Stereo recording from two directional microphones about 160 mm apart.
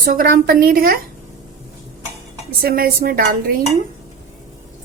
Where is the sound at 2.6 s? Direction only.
70° right (ahead or behind).